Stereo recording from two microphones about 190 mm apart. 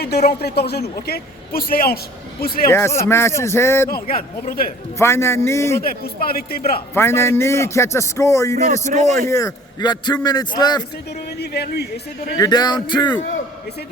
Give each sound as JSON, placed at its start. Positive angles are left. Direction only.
{"t": 0.0, "sound": "a man's voice", "side_deg": 55}
{"t": 2.6, "sound": "a man's voice", "side_deg": 15}
{"t": 4.1, "sound": "speech", "side_deg": 50}
{"t": 4.9, "sound": "a man's voice", "side_deg": 15}
{"t": 5.8, "sound": "speech", "side_deg": 50}
{"t": 6.9, "sound": "a man's voice", "side_deg": 15}
{"t": 8.9, "sound": "a man's voice", "side_deg": -40}
{"t": 9.2, "sound": "a man's voice", "side_deg": 15}
{"t": 11.3, "sound": "a man's voice", "side_deg": 60}
{"t": 12.4, "sound": "a man's voice", "side_deg": 20}